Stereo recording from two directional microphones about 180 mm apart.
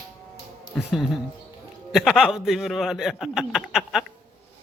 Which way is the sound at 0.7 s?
Centre (ahead or behind).